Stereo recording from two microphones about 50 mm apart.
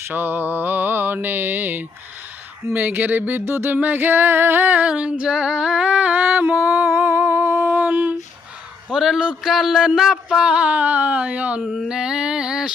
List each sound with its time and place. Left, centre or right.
0.1 s mantra: right
2.7 s female singing: right
3.4 s mantra: right
3.8 s female singing: right
4.9 s a sound: right
5.4 s humming: centre
6.1 s a sound: right
7.1 s humming: right
7.6 s a sound: right
8.9 s a man's voice: centre
9.4 s a sound: centre; by 11.6 s right
11.9 s female singing: centre